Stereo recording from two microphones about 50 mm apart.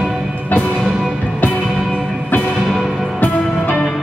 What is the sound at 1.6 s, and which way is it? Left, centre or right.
Music, centre.